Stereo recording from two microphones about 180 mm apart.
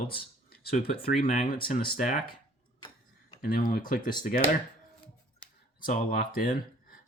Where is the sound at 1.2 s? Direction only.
50° left (ahead or behind).